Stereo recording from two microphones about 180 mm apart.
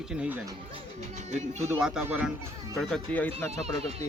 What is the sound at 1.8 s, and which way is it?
Speech, 5° right (ahead or behind).